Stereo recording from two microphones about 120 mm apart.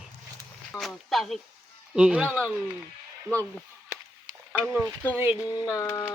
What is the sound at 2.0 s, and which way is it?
Speech, 10° right (ahead or behind).